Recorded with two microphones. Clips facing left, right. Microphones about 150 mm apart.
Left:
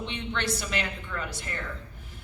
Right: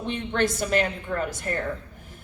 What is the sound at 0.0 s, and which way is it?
A woman's voice, 45° right (ahead or behind).